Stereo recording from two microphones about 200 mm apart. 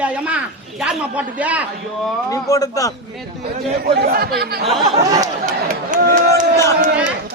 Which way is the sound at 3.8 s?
50° right (ahead or behind).